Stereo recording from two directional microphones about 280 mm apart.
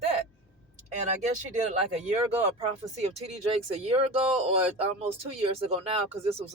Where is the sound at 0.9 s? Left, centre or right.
Right.